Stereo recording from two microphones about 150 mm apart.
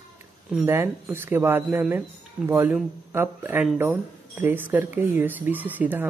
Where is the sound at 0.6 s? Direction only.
15° right (ahead or behind).